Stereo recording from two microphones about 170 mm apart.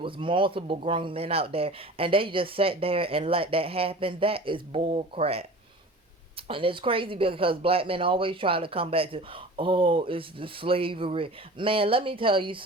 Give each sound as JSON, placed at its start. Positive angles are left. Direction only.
{"t": 0.0, "sound": "speech", "side_deg": -30}